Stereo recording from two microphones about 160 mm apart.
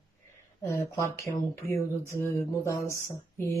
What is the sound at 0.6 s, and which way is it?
Speech, 15° left (ahead or behind).